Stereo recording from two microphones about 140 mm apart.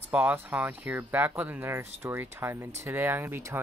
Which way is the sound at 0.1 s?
10° right (ahead or behind).